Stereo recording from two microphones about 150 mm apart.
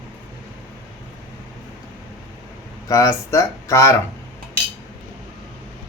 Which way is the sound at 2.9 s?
20° left (ahead or behind).